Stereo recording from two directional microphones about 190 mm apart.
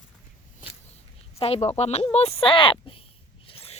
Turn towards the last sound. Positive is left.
turn(degrees=30)  # may be behind; listen again after turning